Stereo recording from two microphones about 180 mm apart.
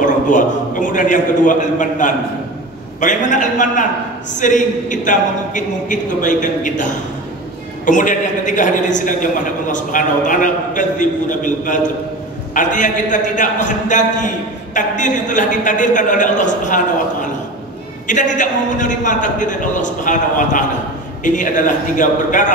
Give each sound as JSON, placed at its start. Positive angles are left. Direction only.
{"t": 0.0, "sound": "a man's voice", "side_deg": 45}